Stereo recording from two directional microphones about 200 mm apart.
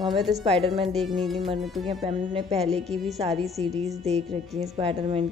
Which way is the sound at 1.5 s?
25° right (ahead or behind).